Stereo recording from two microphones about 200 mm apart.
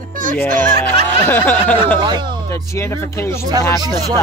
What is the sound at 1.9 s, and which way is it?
Speech, 20° right (ahead or behind).